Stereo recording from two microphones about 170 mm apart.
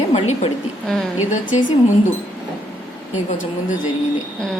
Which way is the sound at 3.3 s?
50° left (ahead or behind).